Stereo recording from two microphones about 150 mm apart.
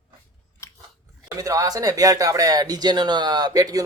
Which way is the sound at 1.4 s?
25° right (ahead or behind).